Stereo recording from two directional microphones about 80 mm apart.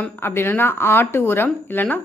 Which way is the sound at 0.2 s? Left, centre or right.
Left.